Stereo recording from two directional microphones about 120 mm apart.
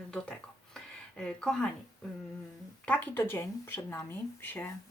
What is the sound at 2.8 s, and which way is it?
Speech, 15° left (ahead or behind).